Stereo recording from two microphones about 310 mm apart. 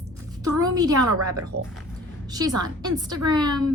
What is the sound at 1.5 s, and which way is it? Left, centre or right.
Speech, right.